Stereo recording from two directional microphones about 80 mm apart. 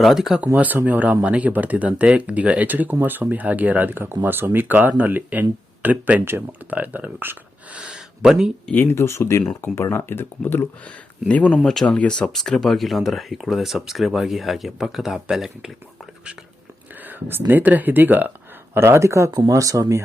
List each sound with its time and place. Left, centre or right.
0.0 s speech: centre
0.5 s speech: right
7.8 s speech: centre
8.7 s speech: left; by 15.7 s centre
17.0 s a sound: right
17.5 s speech: right